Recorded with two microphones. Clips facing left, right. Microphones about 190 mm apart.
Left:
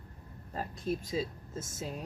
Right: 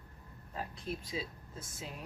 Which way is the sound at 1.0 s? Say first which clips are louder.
Left 6 dB; 45° left (ahead or behind).